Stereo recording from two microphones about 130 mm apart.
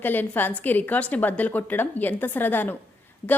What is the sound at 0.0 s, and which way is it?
A woman's voice, 15° left (ahead or behind).